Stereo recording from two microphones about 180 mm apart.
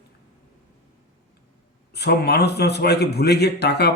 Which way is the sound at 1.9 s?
65° left (ahead or behind).